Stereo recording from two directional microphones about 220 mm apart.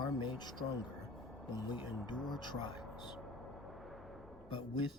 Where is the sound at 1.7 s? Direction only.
20° left (ahead or behind).